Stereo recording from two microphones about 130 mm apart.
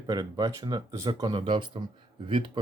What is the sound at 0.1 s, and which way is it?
Speech, 30° right (ahead or behind).